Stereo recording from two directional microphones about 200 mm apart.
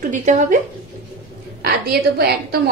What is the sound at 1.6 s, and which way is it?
Speech, 50° right (ahead or behind).